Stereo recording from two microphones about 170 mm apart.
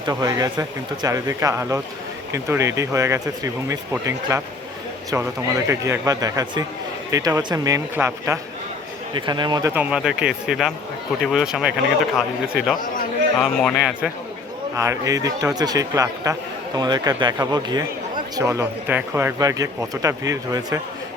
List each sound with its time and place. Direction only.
0.0 s speech: 20° right (ahead or behind)
9.1 s speech: 25° right (ahead or behind)
9.7 s speech: 5° right (ahead or behind)
14.8 s speech: 20° right (ahead or behind)